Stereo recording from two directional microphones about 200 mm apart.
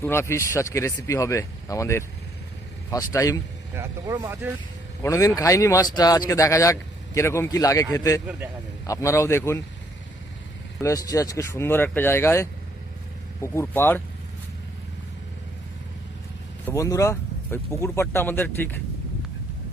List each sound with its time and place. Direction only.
0.0 s speech: 10° left (ahead or behind)
3.8 s speech: 15° right (ahead or behind)
5.0 s speech: 15° left (ahead or behind)
10.8 s speech: 15° left (ahead or behind)
16.6 s speech: 15° left (ahead or behind)